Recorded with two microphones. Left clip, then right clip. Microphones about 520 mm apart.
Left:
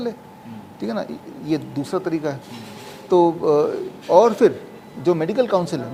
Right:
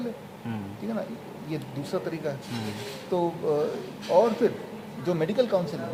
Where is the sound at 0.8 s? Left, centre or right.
Left.